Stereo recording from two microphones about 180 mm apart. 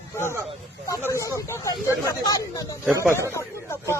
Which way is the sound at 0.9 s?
15° left (ahead or behind).